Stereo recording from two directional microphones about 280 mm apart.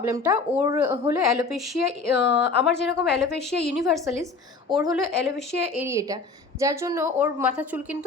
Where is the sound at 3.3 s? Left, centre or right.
Centre.